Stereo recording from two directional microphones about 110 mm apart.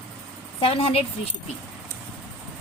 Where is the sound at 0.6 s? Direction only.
60° left (ahead or behind).